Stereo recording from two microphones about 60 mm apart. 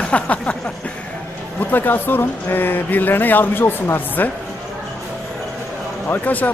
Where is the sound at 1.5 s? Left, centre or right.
Left.